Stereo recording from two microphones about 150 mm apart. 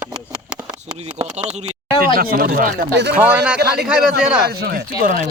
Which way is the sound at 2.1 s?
75° right (ahead or behind).